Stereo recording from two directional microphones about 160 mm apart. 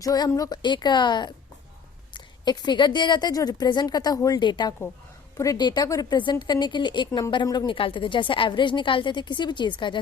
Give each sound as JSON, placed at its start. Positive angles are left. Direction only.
{"t": 0.0, "sound": "a woman's voice", "side_deg": 20}